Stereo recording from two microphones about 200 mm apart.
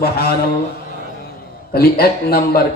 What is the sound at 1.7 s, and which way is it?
Music, 50° left (ahead or behind).